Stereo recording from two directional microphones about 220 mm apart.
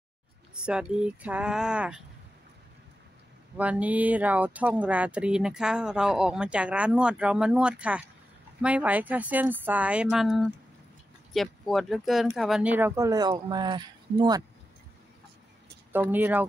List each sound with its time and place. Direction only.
0.6 s speech: 5° right (ahead or behind)
3.5 s speech: 5° right (ahead or behind)
15.9 s speech: 10° right (ahead or behind)